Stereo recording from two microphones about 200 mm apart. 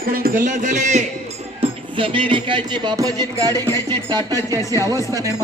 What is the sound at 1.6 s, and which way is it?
Music, 25° right (ahead or behind).